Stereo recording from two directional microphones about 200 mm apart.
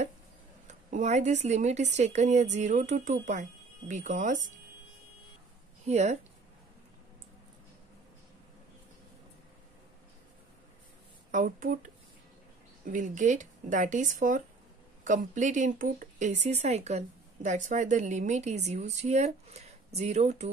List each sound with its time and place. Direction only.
0.7 s speech: 35° right (ahead or behind)
5.9 s speech: 35° right (ahead or behind)
11.3 s speech: 40° right (ahead or behind)